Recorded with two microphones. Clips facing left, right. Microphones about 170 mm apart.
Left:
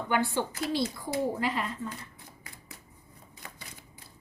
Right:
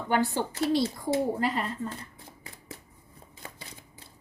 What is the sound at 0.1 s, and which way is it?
Speech, 40° right (ahead or behind).